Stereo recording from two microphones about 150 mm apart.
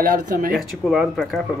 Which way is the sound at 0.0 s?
70° right (ahead or behind).